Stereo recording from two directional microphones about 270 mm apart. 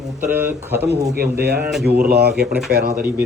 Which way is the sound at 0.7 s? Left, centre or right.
Right.